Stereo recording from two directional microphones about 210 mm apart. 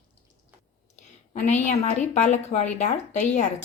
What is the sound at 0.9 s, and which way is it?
A woman's voice, 35° left (ahead or behind).